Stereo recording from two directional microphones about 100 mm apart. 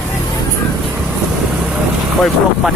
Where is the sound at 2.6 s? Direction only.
5° right (ahead or behind).